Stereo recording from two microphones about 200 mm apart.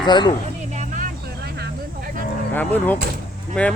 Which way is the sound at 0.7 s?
40° right (ahead or behind).